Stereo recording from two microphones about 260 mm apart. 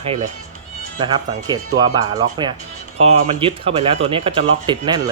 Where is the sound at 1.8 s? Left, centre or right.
Centre.